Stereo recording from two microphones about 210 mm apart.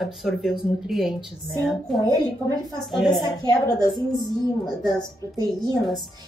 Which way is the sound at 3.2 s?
20° left (ahead or behind).